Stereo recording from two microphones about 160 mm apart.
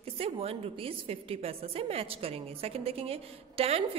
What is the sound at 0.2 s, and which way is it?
A woman's voice, 35° right (ahead or behind).